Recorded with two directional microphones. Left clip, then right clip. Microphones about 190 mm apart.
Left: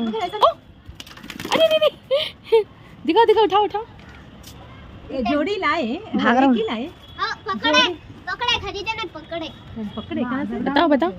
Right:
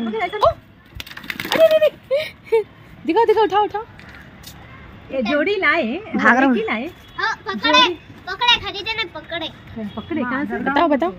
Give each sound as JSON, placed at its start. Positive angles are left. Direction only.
{"t": 0.1, "sound": "a sound", "side_deg": -30}
{"t": 1.5, "sound": "a sound", "side_deg": 0}
{"t": 3.1, "sound": "speech", "side_deg": -5}
{"t": 5.1, "sound": "a woman's voice", "side_deg": -30}
{"t": 6.1, "sound": "a woman's voice", "side_deg": 10}
{"t": 6.6, "sound": "a woman's voice", "side_deg": -30}
{"t": 7.2, "sound": "a sound", "side_deg": -50}
{"t": 8.6, "sound": "speech", "side_deg": 0}
{"t": 9.9, "sound": "speech", "side_deg": -45}
{"t": 10.6, "sound": "speech", "side_deg": 0}